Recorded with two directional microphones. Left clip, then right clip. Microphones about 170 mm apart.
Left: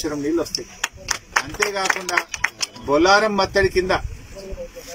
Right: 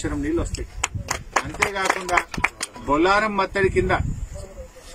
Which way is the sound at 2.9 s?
Centre (ahead or behind).